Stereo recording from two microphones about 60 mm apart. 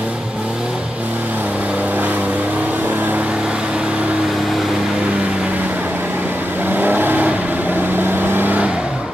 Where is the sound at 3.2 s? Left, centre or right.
Centre.